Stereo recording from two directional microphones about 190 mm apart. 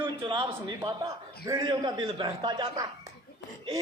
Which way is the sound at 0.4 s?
20° right (ahead or behind).